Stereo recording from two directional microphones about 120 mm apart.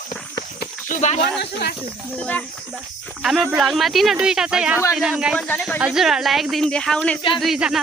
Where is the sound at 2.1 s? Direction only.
10° left (ahead or behind).